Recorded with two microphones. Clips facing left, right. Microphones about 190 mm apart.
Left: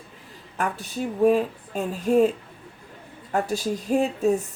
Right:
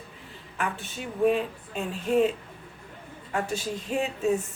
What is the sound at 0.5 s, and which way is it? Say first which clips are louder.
Speech: left 4 dB; 40° left (ahead or behind).